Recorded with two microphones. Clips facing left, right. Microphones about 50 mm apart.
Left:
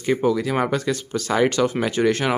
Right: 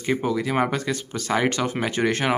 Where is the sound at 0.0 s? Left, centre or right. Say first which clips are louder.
Left 3 dB; centre.